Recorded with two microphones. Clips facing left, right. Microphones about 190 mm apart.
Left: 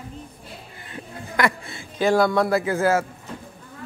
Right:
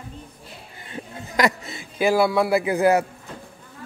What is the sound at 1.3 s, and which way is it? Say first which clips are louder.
Speech: right 2 dB; 20° right (ahead or behind).